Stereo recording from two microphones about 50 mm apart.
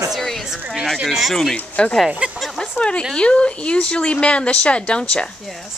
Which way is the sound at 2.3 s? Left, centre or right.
Centre.